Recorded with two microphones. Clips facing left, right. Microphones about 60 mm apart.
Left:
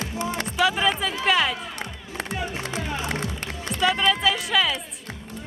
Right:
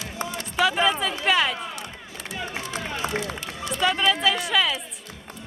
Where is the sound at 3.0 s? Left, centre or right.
Right.